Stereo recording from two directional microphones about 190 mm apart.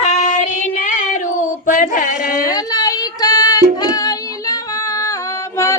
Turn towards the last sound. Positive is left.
turn(degrees=15)  # may be behind; listen again after turning